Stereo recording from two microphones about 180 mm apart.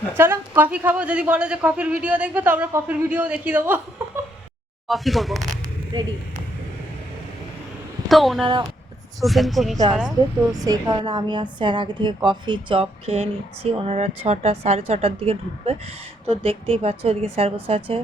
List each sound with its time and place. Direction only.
0.2 s a man's voice: 10° right (ahead or behind)
4.9 s speech: centre (ahead or behind)
8.0 s speech: centre (ahead or behind)
8.4 s a woman's voice: 25° right (ahead or behind)
9.2 s speech: centre (ahead or behind)
10.5 s a woman's voice: 20° right (ahead or behind)